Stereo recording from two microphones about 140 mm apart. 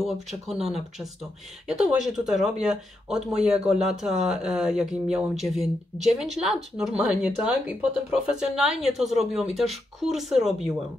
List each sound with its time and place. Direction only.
0.0 s speech: centre (ahead or behind)